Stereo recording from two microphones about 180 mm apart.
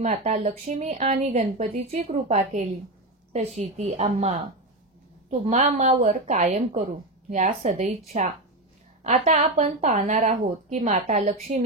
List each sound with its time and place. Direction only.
0.0 s a woman's voice: 35° right (ahead or behind)
9.0 s a woman's voice: 45° right (ahead or behind)